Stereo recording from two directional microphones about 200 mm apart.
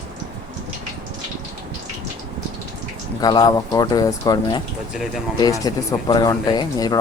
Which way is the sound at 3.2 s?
20° left (ahead or behind).